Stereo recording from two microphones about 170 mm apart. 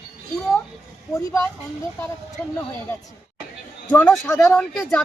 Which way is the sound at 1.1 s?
15° left (ahead or behind).